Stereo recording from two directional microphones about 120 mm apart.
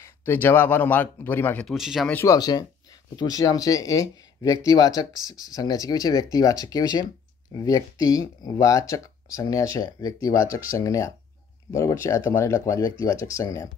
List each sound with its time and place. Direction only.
0.0 s a man's voice: 15° left (ahead or behind)
1.7 s speech: centre (ahead or behind)
2.2 s speech: 35° left (ahead or behind)